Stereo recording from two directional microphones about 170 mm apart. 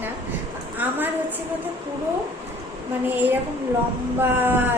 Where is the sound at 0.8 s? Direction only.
10° right (ahead or behind).